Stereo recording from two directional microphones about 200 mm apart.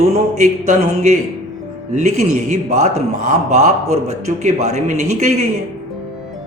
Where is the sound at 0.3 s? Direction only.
35° right (ahead or behind).